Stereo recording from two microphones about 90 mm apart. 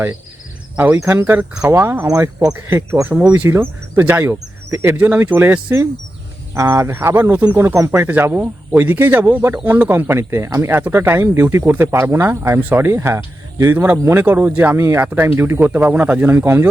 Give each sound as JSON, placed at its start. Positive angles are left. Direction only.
{"t": 0.9, "sound": "speech", "side_deg": -30}
{"t": 2.0, "sound": "speech", "side_deg": -40}
{"t": 2.6, "sound": "speech", "side_deg": -30}
{"t": 3.5, "sound": "speech", "side_deg": -25}
{"t": 7.6, "sound": "speech", "side_deg": -35}
{"t": 7.9, "sound": "speech", "side_deg": -20}